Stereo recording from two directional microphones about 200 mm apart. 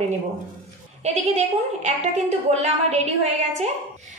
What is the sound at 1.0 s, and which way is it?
A woman's voice, 35° right (ahead or behind).